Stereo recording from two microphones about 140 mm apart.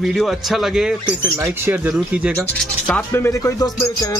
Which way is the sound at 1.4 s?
15° right (ahead or behind).